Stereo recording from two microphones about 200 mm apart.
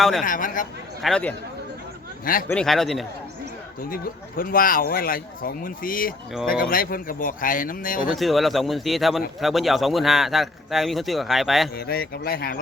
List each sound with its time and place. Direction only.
0.0 s a man's voice: centre (ahead or behind)
0.3 s speech: 40° left (ahead or behind)
1.0 s a man's voice: 5° left (ahead or behind)
2.5 s a man's voice: 5° left (ahead or behind)
3.8 s speech: 45° left (ahead or behind)
8.1 s a man's voice: centre (ahead or behind)
11.8 s speech: 50° left (ahead or behind)